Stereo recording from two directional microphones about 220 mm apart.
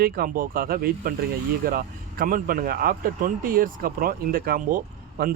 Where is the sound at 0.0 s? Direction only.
40° right (ahead or behind).